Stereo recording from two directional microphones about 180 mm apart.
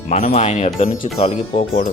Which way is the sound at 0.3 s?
40° left (ahead or behind).